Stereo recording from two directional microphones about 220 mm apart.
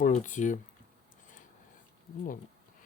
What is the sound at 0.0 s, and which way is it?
Speech, 35° left (ahead or behind).